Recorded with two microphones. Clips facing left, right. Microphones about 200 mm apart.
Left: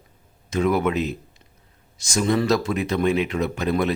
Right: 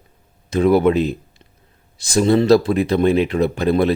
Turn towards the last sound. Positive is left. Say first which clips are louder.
# right 6 dB
turn(degrees=-35)  # may be behind; listen again after turning